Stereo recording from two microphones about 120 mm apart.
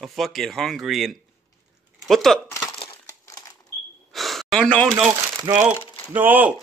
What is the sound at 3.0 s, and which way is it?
Crumpling, 30° left (ahead or behind).